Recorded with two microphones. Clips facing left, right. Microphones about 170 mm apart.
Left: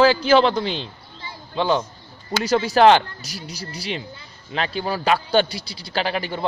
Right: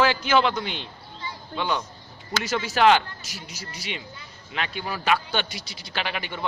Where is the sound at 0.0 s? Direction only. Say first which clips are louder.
Left 6 dB; 35° left (ahead or behind).